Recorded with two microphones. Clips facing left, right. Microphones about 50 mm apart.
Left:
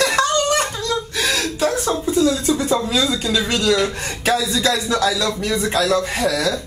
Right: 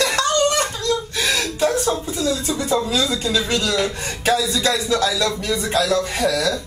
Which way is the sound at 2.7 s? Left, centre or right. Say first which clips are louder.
Left 1 dB; left.